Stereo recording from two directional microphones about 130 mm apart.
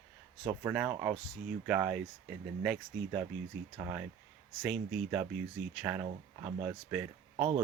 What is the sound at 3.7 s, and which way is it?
Speech, 20° right (ahead or behind).